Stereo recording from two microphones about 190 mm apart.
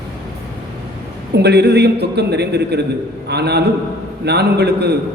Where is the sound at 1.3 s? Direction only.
60° right (ahead or behind).